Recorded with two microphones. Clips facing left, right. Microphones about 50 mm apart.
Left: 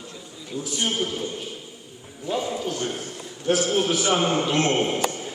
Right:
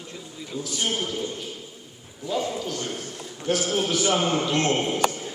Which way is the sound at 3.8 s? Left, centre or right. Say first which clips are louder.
Left 1 dB; centre.